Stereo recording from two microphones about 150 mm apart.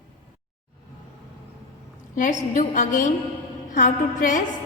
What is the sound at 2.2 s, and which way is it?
A woman's voice, 60° left (ahead or behind).